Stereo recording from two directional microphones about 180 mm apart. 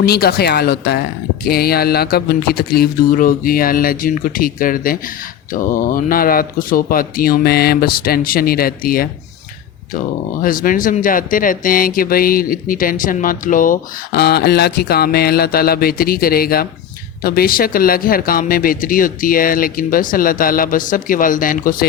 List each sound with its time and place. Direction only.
0.0 s speech: 60° left (ahead or behind)
10.4 s speech: 50° left (ahead or behind)